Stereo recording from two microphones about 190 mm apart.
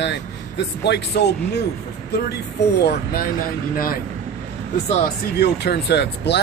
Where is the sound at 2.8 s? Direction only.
55° left (ahead or behind).